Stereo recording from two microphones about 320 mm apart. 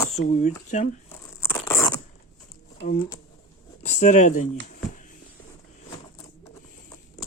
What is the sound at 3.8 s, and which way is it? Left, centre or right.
Speech, left.